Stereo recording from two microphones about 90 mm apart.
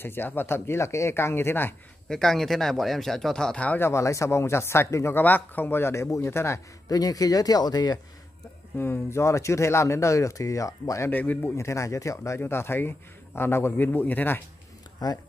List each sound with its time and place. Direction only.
0.0 s a man's voice: 25° left (ahead or behind)
2.0 s speech: 5° left (ahead or behind)
3.8 s a man's voice: 35° left (ahead or behind)
6.9 s speech: 45° left (ahead or behind)
8.7 s speech: 25° left (ahead or behind)
11.1 s a man's voice: 20° left (ahead or behind)
11.5 s a man's voice: 35° left (ahead or behind)
15.0 s speech: 50° left (ahead or behind)